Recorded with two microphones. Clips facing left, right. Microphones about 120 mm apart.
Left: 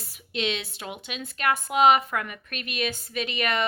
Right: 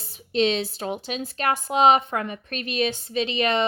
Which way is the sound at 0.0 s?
30° right (ahead or behind).